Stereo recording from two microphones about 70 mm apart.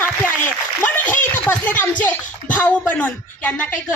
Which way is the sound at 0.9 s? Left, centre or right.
Left.